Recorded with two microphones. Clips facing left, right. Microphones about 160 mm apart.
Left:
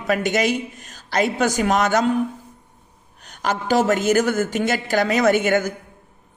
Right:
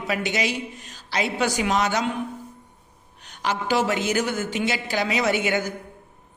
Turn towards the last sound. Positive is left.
turn(degrees=45)  # may be behind; listen again after turning